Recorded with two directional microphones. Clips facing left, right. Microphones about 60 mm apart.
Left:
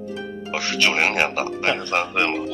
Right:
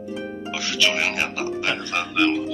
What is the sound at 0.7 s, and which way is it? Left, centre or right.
Speech, left.